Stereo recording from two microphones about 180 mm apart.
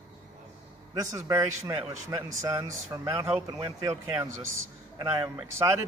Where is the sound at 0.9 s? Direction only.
15° right (ahead or behind).